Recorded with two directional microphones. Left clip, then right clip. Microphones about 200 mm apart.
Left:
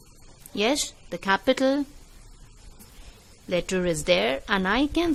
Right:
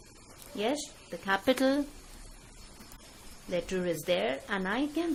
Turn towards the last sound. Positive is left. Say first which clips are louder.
# left 8 dB
turn(degrees=30)  # may be behind; listen again after turning